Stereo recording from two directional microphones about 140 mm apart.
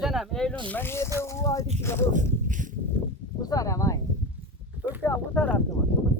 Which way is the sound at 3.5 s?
25° left (ahead or behind).